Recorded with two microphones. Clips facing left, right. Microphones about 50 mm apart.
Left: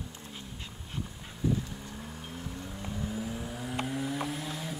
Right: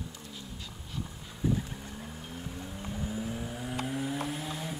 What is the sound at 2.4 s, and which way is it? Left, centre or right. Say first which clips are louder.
Vehicle: even; centre.